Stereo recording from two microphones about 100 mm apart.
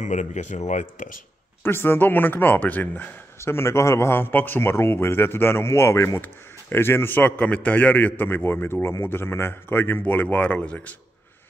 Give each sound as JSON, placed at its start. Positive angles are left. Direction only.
{"t": 1.6, "sound": "a man's voice", "side_deg": 25}